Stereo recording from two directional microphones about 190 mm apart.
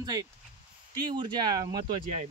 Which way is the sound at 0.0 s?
20° right (ahead or behind).